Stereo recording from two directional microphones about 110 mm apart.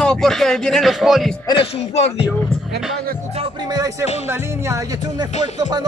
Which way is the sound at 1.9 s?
75° left (ahead or behind).